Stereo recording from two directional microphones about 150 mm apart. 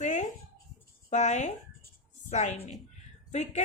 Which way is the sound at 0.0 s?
55° left (ahead or behind).